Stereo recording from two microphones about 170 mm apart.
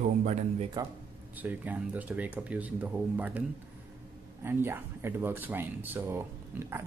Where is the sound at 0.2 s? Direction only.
40° right (ahead or behind).